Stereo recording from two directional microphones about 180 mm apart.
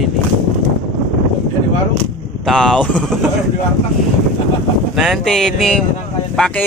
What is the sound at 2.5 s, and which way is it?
Speech, 5° left (ahead or behind).